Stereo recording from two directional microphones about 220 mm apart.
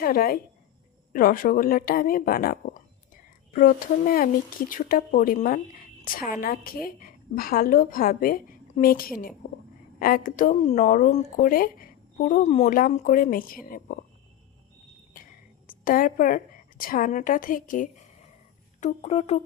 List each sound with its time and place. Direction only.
0.0 s speech: 40° left (ahead or behind)
15.1 s a woman's voice: 40° left (ahead or behind)